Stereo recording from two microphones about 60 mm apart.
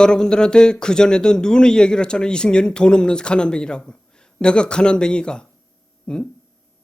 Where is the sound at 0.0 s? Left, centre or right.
Centre.